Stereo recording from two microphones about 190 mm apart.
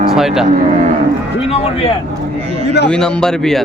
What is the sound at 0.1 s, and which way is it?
Cattle, centre (ahead or behind).